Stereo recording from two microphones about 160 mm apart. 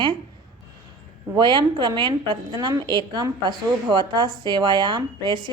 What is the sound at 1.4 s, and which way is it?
A woman's voice, 30° right (ahead or behind).